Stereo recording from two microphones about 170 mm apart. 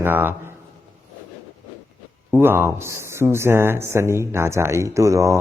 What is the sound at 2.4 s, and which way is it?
Speech, 15° right (ahead or behind).